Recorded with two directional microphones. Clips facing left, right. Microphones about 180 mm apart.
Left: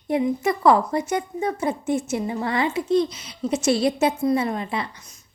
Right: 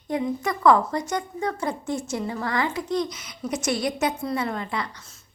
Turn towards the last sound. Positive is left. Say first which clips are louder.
# left 3 dB
turn(degrees=20)  # may be behind; listen again after turning